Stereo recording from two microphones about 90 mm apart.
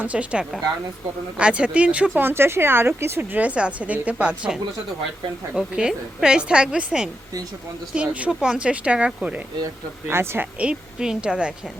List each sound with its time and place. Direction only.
0.0 s a woman's voice: 15° right (ahead or behind)
2.1 s a woman's voice: 25° right (ahead or behind)
10.1 s speech: 30° right (ahead or behind)
10.6 s a woman's voice: 10° right (ahead or behind)